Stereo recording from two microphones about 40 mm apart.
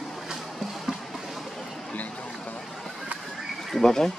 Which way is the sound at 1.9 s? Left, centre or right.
Left.